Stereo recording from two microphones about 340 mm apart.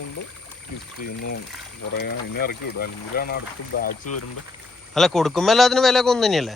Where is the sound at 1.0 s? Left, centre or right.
Left.